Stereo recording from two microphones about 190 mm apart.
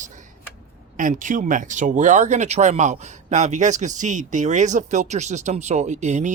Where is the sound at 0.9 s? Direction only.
45° right (ahead or behind).